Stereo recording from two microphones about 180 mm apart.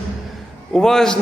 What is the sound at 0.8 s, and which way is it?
Speech, 5° left (ahead or behind).